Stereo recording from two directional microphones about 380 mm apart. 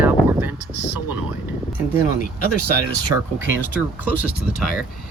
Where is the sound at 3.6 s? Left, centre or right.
Centre.